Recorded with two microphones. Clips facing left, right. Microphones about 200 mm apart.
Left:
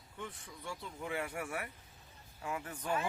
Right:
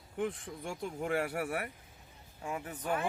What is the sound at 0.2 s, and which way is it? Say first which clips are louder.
Speech: right 11 dB; 50° right (ahead or behind).